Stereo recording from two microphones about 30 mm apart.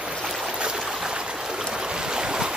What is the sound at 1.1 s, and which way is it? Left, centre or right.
Stream, right.